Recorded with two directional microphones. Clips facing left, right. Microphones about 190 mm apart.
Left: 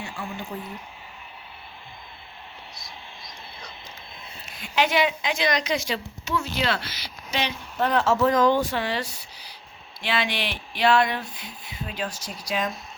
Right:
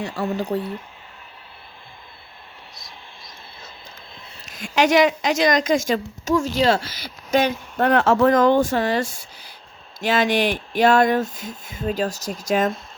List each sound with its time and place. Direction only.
0.0 s speech: 40° right (ahead or behind)
4.5 s a woman's voice: 45° right (ahead or behind)